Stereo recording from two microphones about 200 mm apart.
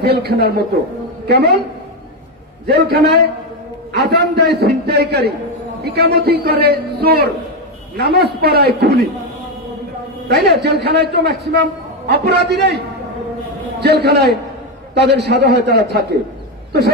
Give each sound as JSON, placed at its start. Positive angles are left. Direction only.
{"t": 0.0, "sound": "a man's voice", "side_deg": -50}
{"t": 2.6, "sound": "a man's voice", "side_deg": -55}
{"t": 10.2, "sound": "a man's voice", "side_deg": -55}